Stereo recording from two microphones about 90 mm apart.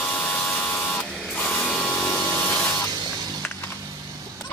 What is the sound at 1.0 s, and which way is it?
Printer, 15° left (ahead or behind).